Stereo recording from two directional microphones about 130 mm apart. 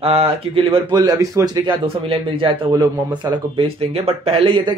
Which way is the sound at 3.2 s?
25° right (ahead or behind).